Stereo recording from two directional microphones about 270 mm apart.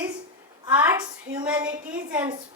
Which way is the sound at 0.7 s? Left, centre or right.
Centre.